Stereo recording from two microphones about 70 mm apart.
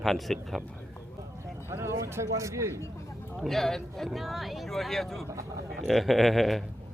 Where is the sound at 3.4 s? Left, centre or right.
Centre.